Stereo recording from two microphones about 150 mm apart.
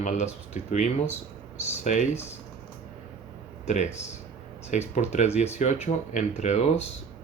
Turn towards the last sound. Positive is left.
turn(degrees=45)  # may be behind; listen again after turning